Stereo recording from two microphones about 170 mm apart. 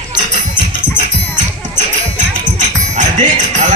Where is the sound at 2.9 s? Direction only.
45° right (ahead or behind).